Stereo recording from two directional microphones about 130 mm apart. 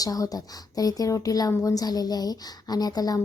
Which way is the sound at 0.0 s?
30° left (ahead or behind).